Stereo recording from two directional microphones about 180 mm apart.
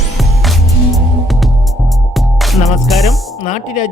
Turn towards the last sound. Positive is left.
turn(degrees=40)  # may be behind; listen again after turning